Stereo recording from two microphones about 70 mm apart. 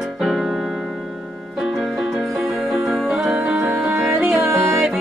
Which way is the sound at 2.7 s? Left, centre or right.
Centre.